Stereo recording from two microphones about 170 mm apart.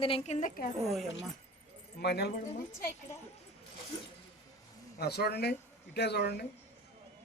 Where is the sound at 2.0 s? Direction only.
75° left (ahead or behind).